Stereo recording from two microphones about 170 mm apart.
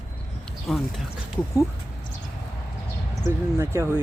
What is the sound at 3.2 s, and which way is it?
Speech, 15° right (ahead or behind).